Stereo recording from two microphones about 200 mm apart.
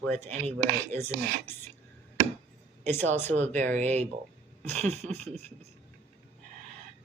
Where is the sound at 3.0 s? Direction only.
35° right (ahead or behind).